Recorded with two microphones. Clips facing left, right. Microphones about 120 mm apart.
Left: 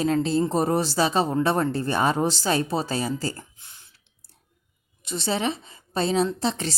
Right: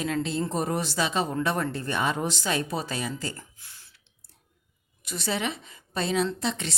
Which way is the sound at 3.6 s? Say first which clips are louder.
Left 1 dB; 20° left (ahead or behind).